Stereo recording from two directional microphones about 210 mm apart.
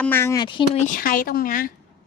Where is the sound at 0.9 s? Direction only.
40° left (ahead or behind).